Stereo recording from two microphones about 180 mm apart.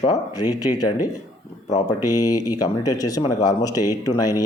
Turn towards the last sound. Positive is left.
turn(degrees=20)  # may be behind; listen again after turning